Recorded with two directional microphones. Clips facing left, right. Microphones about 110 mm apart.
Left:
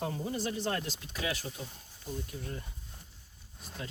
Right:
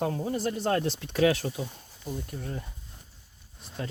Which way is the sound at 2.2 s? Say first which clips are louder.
Right 4 dB; 55° right (ahead or behind).